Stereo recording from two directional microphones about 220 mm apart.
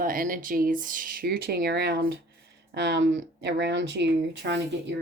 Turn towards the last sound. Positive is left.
turn(degrees=-55)  # may be behind; listen again after turning